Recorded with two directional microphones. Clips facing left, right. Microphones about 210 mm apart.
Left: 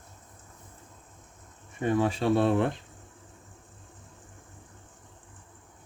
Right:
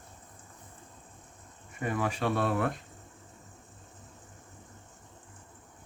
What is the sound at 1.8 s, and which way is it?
Speech, 25° left (ahead or behind).